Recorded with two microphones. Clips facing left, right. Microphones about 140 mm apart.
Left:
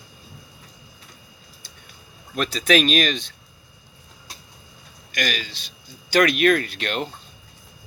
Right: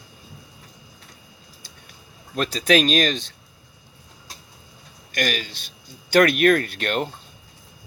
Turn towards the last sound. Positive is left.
turn(degrees=-50)  # may be behind; listen again after turning